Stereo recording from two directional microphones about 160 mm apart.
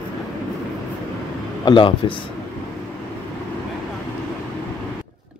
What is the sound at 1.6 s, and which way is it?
Speech, 30° left (ahead or behind).